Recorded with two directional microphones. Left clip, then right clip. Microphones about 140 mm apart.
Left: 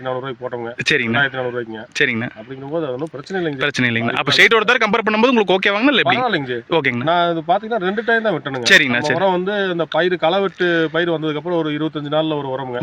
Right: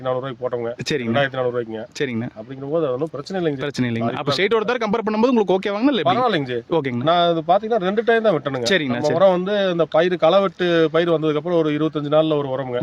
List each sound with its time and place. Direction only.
0.9 s speech: 10° right (ahead or behind)
1.2 s speech: 40° right (ahead or behind)
2.0 s speech: 10° right (ahead or behind)
3.6 s speech: 10° right (ahead or behind)
6.2 s speech: 40° right (ahead or behind)
6.7 s speech: 15° right (ahead or behind)
7.0 s speech: 40° right (ahead or behind)
8.6 s speech: 10° right (ahead or behind)
9.2 s speech: 40° right (ahead or behind)